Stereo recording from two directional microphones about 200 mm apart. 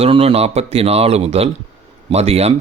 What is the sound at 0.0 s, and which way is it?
Speech, 30° right (ahead or behind).